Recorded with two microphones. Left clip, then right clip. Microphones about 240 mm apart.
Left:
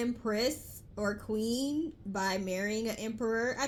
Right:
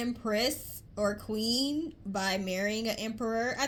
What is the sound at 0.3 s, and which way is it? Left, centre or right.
Speech, right.